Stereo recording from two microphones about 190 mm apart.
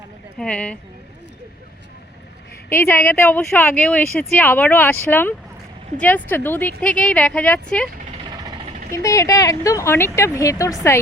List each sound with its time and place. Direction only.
0.3 s speech: 5° left (ahead or behind)
2.6 s speech: 10° left (ahead or behind)
8.9 s speech: 15° left (ahead or behind)